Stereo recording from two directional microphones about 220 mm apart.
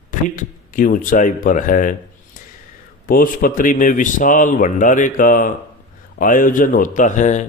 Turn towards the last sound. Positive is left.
turn(degrees=35)  # may be behind; listen again after turning